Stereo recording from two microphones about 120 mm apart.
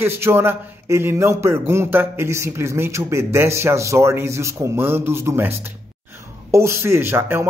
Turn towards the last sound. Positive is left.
turn(degrees=-20)  # may be behind; listen again after turning